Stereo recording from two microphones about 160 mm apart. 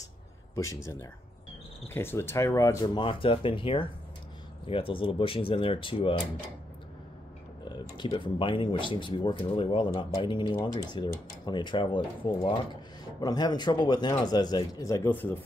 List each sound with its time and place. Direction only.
2.0 s speech: 15° left (ahead or behind); by 6.2 s 35° left (ahead or behind)
8.0 s speech: 30° left (ahead or behind); by 15.3 s 10° left (ahead or behind)